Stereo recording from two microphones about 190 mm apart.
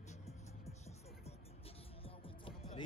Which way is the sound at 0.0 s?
35° left (ahead or behind).